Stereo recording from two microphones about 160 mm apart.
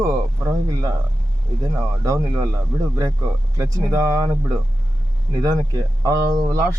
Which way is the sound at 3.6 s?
20° right (ahead or behind).